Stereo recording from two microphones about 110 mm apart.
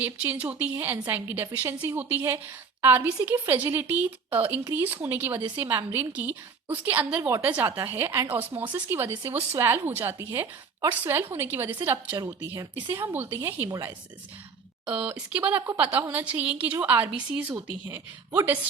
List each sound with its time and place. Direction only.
0.0 s speech: 15° right (ahead or behind)
13.7 s speech: 35° right (ahead or behind)
14.8 s speech: 10° right (ahead or behind)